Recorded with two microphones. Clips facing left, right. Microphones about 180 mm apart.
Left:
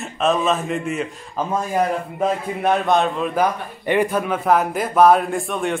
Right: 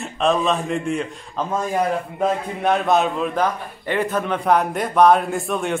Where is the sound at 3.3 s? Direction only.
10° left (ahead or behind).